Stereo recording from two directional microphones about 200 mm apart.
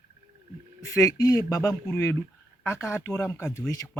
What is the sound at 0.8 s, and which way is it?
Speech, 15° left (ahead or behind).